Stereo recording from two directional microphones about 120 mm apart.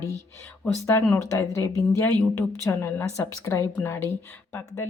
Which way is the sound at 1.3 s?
25° left (ahead or behind).